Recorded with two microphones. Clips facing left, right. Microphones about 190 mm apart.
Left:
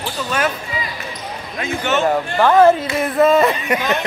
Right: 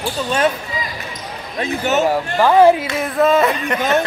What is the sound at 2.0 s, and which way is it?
Speech, 5° right (ahead or behind).